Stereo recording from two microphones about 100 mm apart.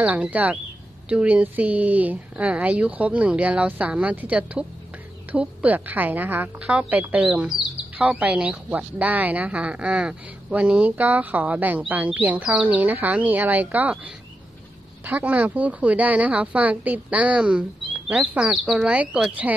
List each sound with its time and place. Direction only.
0.0 s speech: 15° right (ahead or behind)